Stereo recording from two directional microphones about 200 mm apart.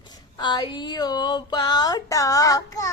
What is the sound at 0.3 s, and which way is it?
Speech, 20° left (ahead or behind).